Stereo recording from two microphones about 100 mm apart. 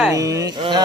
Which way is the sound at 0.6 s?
45° right (ahead or behind).